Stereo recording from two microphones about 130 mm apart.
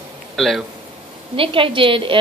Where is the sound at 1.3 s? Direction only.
45° right (ahead or behind).